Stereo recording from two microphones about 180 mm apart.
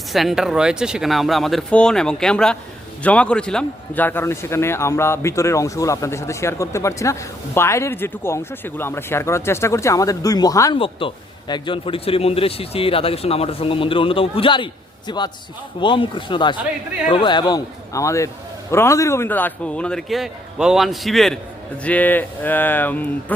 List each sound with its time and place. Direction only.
0.1 s a man's voice: centre (ahead or behind)